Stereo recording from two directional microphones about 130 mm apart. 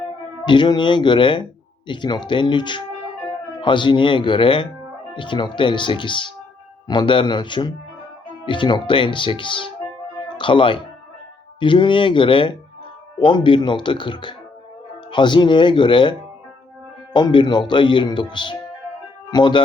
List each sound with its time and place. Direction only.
0.4 s speech: 35° left (ahead or behind)